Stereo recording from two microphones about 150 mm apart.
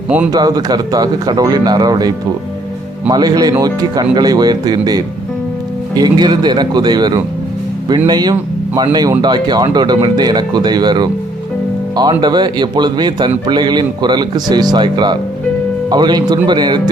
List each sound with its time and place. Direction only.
0.3 s speech: 25° right (ahead or behind)